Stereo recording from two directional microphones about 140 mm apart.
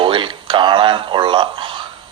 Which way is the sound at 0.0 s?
35° right (ahead or behind).